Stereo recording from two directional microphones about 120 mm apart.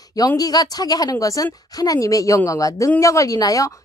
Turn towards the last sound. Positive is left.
turn(degrees=30)  # may be behind; listen again after turning